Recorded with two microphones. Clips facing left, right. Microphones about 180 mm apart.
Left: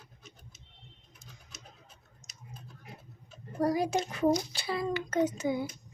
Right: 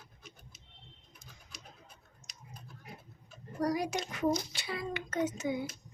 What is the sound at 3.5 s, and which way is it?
A child's voice, 25° left (ahead or behind).